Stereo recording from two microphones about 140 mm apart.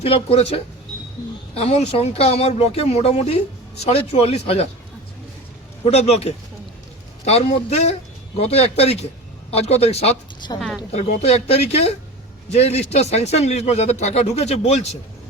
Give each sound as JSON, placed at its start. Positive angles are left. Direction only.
{"t": 0.0, "sound": "speech", "side_deg": 45}
{"t": 5.8, "sound": "speech", "side_deg": 50}
{"t": 10.6, "sound": "a woman's voice", "side_deg": 0}
{"t": 11.2, "sound": "speech", "side_deg": 50}